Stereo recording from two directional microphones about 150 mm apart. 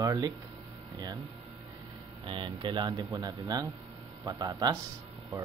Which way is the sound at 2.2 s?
35° right (ahead or behind).